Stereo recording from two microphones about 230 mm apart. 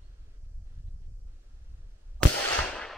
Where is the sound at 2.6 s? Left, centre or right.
Centre.